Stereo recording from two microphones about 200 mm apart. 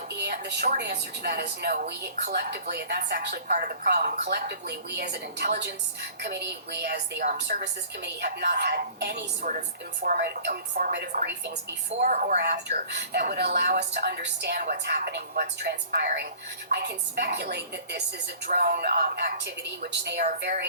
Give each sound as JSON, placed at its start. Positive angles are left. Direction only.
{"t": 0.2, "sound": "a woman's voice", "side_deg": -55}
{"t": 9.5, "sound": "a woman's voice", "side_deg": -40}
{"t": 10.2, "sound": "a woman's voice", "side_deg": -55}
{"t": 11.9, "sound": "a woman's voice", "side_deg": -45}
{"t": 12.4, "sound": "a woman's voice", "side_deg": -55}